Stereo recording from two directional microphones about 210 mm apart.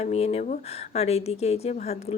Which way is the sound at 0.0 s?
30° left (ahead or behind).